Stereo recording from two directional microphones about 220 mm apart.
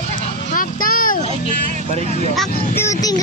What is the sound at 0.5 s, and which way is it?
Vehicle, 40° left (ahead or behind).